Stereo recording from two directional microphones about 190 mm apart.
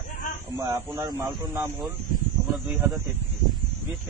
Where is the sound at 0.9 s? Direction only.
20° right (ahead or behind).